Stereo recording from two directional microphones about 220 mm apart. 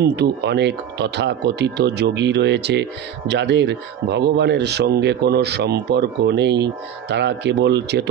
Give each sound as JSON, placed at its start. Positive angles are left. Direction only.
{"t": 0.0, "sound": "speech", "side_deg": -50}